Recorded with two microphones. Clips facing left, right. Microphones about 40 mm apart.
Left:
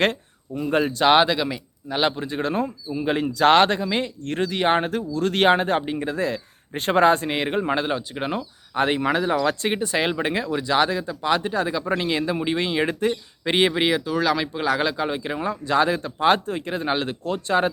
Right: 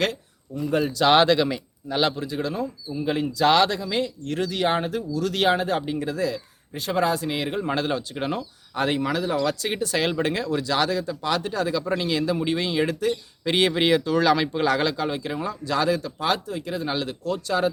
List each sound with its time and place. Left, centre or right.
0.0 s speech: left
1.0 s speech: centre
2.0 s speech: left
2.2 s speech: left
5.8 s speech: left
7.7 s speech: centre
9.7 s speech: left